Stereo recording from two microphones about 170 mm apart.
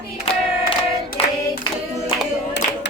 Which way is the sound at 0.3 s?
35° left (ahead or behind).